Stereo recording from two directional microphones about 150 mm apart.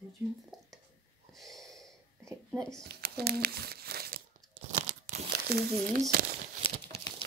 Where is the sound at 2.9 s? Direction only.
90° right.